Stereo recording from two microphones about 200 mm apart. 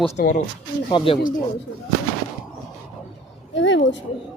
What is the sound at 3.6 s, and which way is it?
Speech, 65° left (ahead or behind).